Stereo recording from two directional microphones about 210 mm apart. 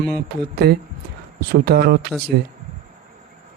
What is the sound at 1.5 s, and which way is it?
Speech, 50° right (ahead or behind).